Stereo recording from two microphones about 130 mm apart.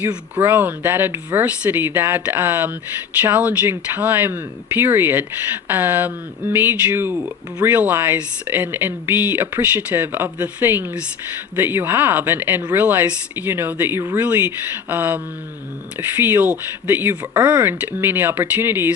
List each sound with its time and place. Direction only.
0.3 s speech: 15° right (ahead or behind)